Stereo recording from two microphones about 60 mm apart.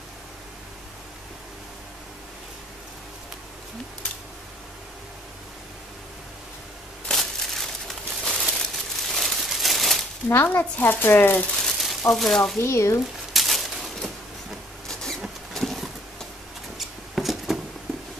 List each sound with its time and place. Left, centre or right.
7.1 s crumpling: centre
8.5 s a sound: centre
10.2 s speech: left
11.5 s frying: centre
12.1 s speech: centre
12.5 s speech: left
13.3 s a sound: centre
14.9 s vehicle: centre
15.2 s a sound: centre